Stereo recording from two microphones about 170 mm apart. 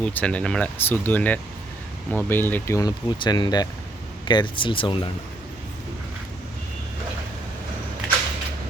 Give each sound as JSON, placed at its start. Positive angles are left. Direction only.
{"t": 0.0, "sound": "speech", "side_deg": 10}